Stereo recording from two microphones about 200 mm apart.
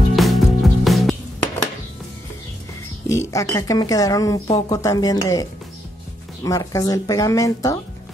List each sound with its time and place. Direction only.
0.1 s music: centre (ahead or behind)
3.1 s speech: 15° left (ahead or behind)